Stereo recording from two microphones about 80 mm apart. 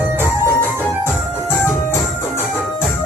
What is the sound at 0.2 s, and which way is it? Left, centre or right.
Music, left.